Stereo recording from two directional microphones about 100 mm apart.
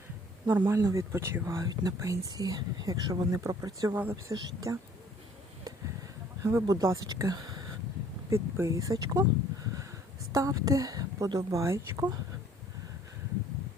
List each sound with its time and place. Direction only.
0.5 s speech: 25° right (ahead or behind)
3.9 s speech: 20° right (ahead or behind)
4.3 s speech: 35° right (ahead or behind)
6.4 s speech: 25° right (ahead or behind)
8.3 s speech: 30° right (ahead or behind)
10.3 s speech: 35° right (ahead or behind)